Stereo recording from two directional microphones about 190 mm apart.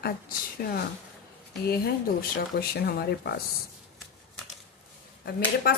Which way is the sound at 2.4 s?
55° left (ahead or behind).